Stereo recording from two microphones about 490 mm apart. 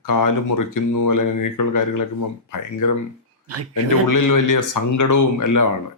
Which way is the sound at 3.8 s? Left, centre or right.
Left.